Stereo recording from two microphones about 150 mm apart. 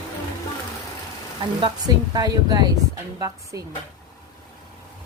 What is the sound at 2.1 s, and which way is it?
Speech, 25° right (ahead or behind).